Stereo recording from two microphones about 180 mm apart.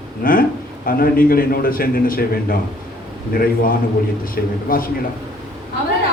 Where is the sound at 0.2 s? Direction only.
50° left (ahead or behind).